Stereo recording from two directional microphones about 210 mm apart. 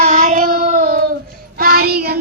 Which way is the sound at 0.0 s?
35° right (ahead or behind).